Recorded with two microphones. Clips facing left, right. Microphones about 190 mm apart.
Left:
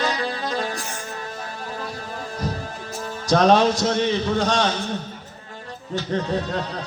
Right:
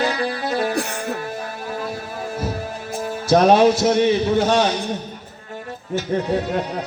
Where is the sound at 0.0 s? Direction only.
15° right (ahead or behind).